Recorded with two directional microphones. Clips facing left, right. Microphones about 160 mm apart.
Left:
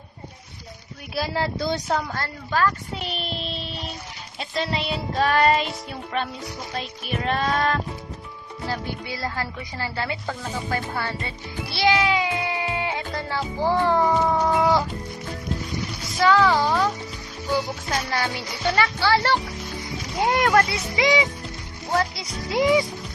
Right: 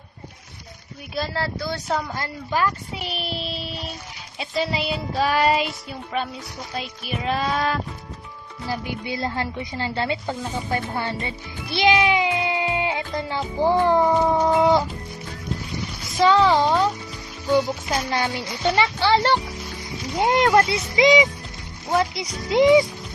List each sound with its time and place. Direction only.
1.1 s speech: 15° left (ahead or behind)
2.1 s child singing: 15° right (ahead or behind)
8.7 s speech: 15° right (ahead or behind)
16.2 s speech: 25° right (ahead or behind)
18.1 s speech: 20° right (ahead or behind)